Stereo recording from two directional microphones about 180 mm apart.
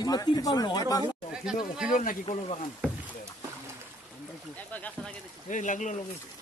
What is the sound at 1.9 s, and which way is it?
Speech, 45° left (ahead or behind).